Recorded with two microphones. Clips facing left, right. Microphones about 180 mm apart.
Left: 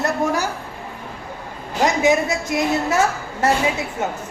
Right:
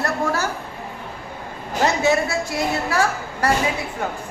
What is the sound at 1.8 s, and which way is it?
A woman's voice, 15° left (ahead or behind).